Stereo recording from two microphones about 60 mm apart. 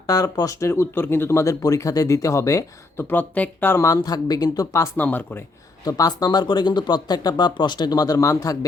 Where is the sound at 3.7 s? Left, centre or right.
Left.